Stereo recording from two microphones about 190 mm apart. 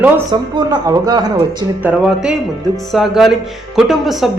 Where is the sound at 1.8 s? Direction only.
5° right (ahead or behind).